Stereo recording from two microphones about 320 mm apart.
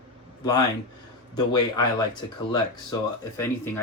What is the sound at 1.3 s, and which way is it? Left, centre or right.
Speech, centre.